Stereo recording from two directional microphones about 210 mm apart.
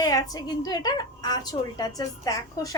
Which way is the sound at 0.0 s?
15° left (ahead or behind).